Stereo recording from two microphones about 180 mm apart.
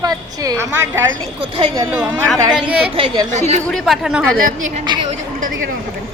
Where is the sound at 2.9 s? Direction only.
25° right (ahead or behind).